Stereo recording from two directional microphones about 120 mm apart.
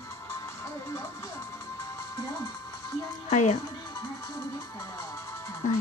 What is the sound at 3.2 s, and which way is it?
Speech, 70° left (ahead or behind).